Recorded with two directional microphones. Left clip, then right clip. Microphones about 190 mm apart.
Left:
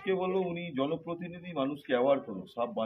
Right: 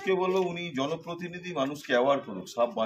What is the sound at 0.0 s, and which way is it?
Speech, 20° right (ahead or behind).